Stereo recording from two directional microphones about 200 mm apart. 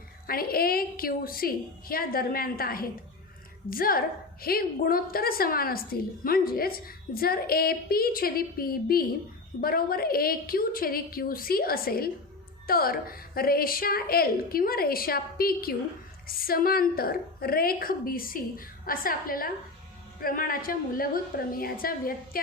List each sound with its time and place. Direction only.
0.3 s a woman's voice: 50° left (ahead or behind)